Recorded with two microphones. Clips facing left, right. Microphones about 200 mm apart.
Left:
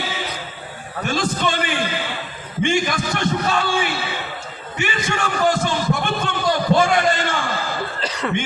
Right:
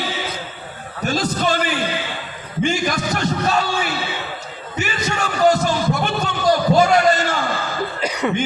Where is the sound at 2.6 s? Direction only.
40° right (ahead or behind).